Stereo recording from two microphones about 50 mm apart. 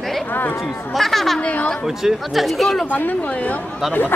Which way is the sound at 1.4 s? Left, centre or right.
Left.